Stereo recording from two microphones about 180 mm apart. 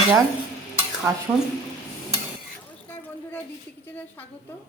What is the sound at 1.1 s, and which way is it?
Speech, 15° right (ahead or behind).